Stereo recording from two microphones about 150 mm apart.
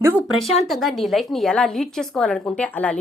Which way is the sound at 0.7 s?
Centre (ahead or behind).